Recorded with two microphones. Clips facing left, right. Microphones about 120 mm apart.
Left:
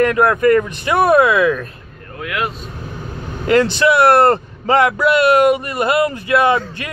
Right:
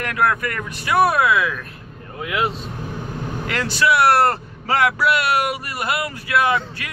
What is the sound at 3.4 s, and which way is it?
A man's voice, 25° left (ahead or behind).